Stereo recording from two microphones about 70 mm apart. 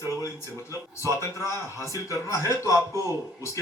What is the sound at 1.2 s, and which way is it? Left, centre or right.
Speech, left.